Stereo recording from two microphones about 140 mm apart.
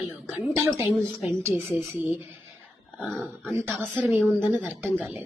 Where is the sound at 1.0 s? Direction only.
5° left (ahead or behind).